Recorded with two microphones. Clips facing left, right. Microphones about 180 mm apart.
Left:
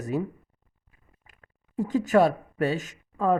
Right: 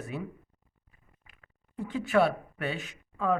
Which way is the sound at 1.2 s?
40° left (ahead or behind).